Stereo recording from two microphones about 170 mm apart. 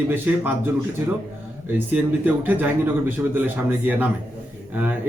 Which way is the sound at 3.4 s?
10° right (ahead or behind).